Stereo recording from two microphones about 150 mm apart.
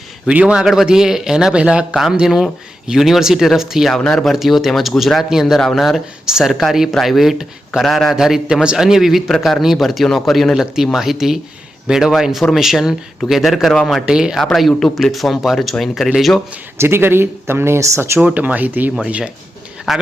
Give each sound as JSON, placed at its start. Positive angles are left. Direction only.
{"t": 0.3, "sound": "a man's voice", "side_deg": -5}
{"t": 16.7, "sound": "a man's voice", "side_deg": -15}